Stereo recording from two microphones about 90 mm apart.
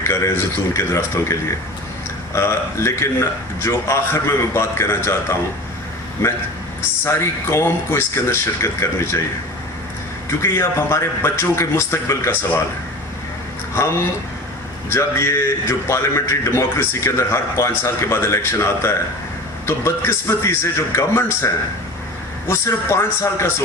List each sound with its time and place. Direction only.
0.0 s a man's voice: 30° left (ahead or behind)
7.0 s speech: 30° left (ahead or behind)
10.4 s a man's voice: 30° left (ahead or behind)
14.8 s a man's voice: 30° left (ahead or behind)